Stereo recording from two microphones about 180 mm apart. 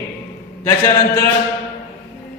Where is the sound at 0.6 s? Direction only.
15° left (ahead or behind).